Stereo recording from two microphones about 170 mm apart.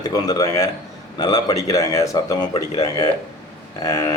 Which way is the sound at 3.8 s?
20° left (ahead or behind).